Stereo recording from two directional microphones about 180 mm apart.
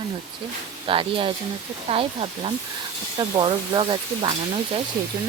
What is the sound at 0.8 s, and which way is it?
Frying, 30° right (ahead or behind).